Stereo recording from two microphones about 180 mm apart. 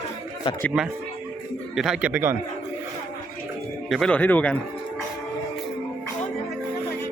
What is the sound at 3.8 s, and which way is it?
Speech, centre (ahead or behind).